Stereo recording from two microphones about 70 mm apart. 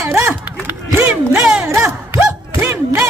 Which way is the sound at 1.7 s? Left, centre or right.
Right.